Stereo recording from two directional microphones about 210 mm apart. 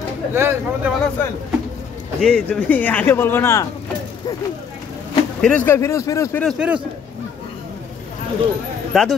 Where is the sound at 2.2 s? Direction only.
5° left (ahead or behind).